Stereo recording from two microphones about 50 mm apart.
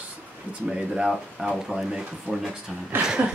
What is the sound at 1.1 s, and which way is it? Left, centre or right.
A man's voice, centre.